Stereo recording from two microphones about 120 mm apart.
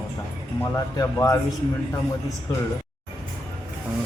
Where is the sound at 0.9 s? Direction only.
25° left (ahead or behind).